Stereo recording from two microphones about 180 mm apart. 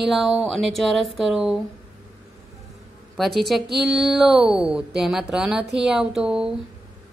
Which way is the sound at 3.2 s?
Centre (ahead or behind).